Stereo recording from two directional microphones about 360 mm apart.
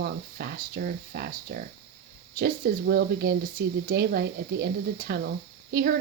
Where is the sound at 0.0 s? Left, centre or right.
Right.